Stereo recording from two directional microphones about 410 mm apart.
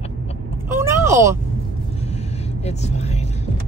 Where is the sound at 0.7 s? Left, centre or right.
Centre.